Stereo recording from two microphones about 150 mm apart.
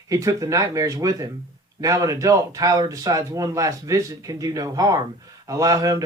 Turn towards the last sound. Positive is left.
turn(degrees=-25)  # may be behind; listen again after turning